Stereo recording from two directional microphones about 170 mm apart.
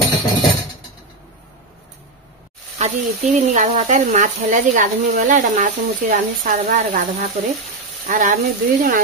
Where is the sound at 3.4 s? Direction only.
45° right (ahead or behind).